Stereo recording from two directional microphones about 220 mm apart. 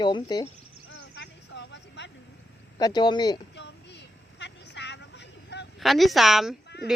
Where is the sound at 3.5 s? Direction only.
50° left (ahead or behind).